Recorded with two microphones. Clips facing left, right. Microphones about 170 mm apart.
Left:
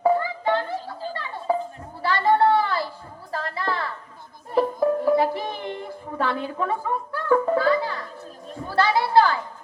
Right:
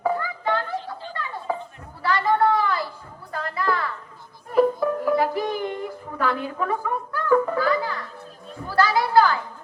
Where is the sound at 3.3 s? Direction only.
30° left (ahead or behind).